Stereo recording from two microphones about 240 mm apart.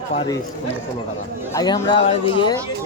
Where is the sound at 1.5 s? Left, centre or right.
Centre.